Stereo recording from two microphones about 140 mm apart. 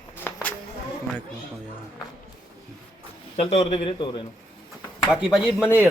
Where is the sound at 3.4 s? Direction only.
45° left (ahead or behind).